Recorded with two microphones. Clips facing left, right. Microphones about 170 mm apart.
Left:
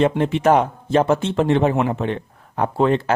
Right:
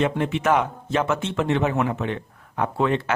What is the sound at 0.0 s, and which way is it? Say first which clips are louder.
Speech: left 5 dB; 35° left (ahead or behind).